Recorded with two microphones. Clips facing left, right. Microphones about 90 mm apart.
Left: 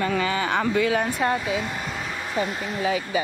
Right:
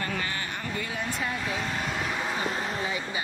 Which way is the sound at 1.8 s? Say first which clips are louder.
Right 1 dB; centre (ahead or behind).